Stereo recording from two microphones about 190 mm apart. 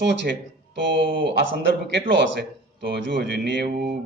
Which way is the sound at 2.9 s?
60° right (ahead or behind).